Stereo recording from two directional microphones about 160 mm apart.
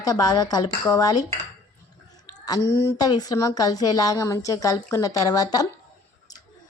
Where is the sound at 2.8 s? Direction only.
25° left (ahead or behind).